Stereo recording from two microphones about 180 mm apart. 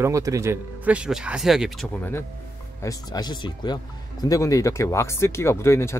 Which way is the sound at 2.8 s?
20° left (ahead or behind).